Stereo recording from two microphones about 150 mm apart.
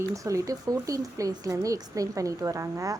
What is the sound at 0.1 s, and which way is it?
Speech, 20° right (ahead or behind).